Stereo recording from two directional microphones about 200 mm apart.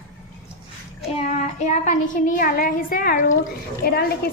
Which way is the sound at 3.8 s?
50° left (ahead or behind).